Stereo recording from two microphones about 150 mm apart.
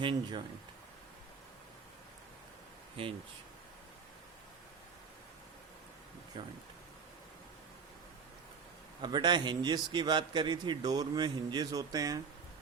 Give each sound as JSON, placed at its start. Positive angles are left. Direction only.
{"t": 0.0, "sound": "speech", "side_deg": -30}
{"t": 6.3, "sound": "speech", "side_deg": -35}
{"t": 9.0, "sound": "a man's voice", "side_deg": -30}